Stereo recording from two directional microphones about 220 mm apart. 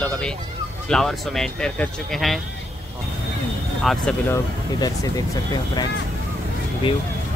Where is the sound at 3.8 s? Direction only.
5° left (ahead or behind).